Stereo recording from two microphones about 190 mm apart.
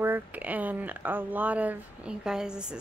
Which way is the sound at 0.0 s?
10° right (ahead or behind).